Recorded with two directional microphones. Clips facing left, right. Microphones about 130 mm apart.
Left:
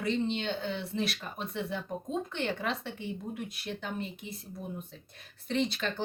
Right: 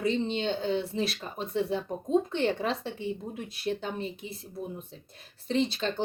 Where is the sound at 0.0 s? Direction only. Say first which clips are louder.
Right 3 dB; 25° right (ahead or behind).